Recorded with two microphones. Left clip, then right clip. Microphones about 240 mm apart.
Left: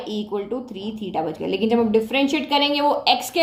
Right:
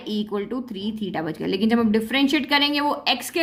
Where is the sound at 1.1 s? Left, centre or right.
Right.